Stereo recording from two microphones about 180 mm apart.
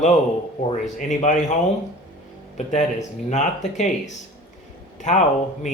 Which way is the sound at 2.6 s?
40° left (ahead or behind).